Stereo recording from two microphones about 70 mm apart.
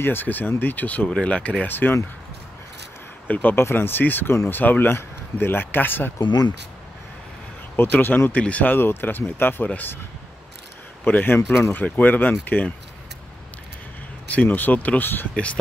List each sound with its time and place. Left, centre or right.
0.0 s speech: left
3.3 s speech: left
6.1 s speech: left
7.7 s speech: left
11.1 s speech: left
14.3 s speech: left
15.3 s speech: centre